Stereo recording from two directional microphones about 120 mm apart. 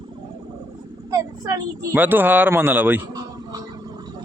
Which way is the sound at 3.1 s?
35° right (ahead or behind).